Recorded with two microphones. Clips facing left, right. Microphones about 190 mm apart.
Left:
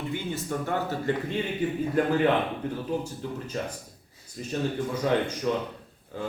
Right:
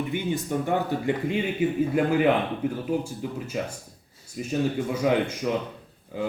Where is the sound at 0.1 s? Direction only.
15° right (ahead or behind).